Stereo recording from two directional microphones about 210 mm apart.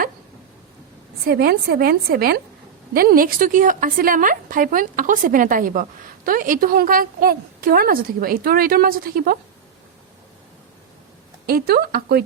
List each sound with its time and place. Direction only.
1.2 s a woman's voice: 45° right (ahead or behind)
11.4 s a woman's voice: 50° right (ahead or behind)